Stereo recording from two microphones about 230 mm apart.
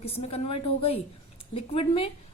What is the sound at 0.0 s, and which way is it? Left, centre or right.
A woman's voice, left.